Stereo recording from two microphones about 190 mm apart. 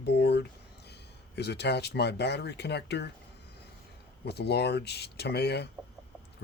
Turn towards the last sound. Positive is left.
turn(degrees=60)  # may be behind; listen again after turning